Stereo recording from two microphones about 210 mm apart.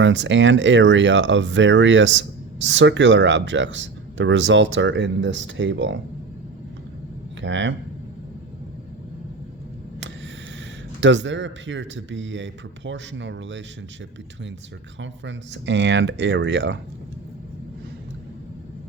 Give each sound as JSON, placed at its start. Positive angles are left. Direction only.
{"t": 0.0, "sound": "speech", "side_deg": -60}
{"t": 7.4, "sound": "speech", "side_deg": -60}
{"t": 11.0, "sound": "speech", "side_deg": -60}
{"t": 15.0, "sound": "speech", "side_deg": -60}